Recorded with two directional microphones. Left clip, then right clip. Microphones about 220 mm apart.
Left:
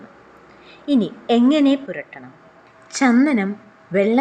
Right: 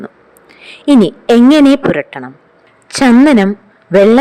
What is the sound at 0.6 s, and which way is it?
Speech, 45° right (ahead or behind).